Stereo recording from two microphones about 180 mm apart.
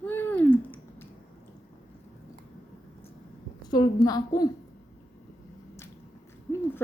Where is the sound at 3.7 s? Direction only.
20° left (ahead or behind).